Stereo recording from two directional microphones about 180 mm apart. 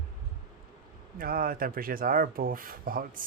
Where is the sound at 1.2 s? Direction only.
55° right (ahead or behind).